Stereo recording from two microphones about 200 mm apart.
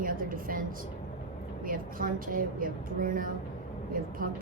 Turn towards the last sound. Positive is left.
turn(degrees=-45)  # may be behind; listen again after turning